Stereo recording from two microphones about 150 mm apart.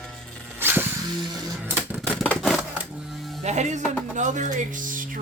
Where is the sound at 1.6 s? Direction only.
10° right (ahead or behind).